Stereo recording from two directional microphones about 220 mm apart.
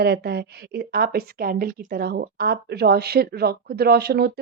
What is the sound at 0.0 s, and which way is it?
Speech, 45° right (ahead or behind).